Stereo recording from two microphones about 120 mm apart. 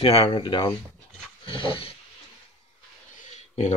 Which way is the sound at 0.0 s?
50° left (ahead or behind).